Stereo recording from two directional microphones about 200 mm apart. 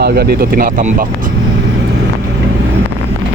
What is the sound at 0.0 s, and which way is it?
Speech, 50° right (ahead or behind).